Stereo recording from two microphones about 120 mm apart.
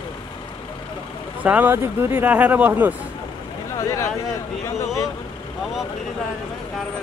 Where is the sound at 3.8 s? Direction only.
25° left (ahead or behind).